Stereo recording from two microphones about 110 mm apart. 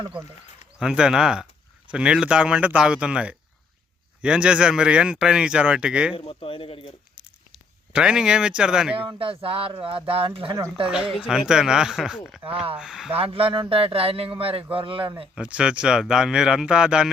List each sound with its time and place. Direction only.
0.8 s speech: 5° right (ahead or behind)
6.1 s speech: 55° left (ahead or behind)
7.2 s a sound: 10° right (ahead or behind)
9.0 s speech: 55° right (ahead or behind)
10.8 s speech: 5° right (ahead or behind)
13.1 s speech: 60° right (ahead or behind)
15.4 s speech: 10° right (ahead or behind)